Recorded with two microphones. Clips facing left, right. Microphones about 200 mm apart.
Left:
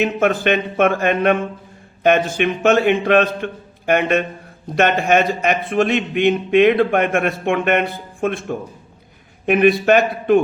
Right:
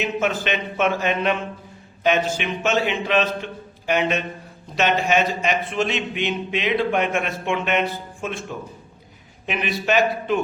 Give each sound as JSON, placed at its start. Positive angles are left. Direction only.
{"t": 0.0, "sound": "a man's voice", "side_deg": 55}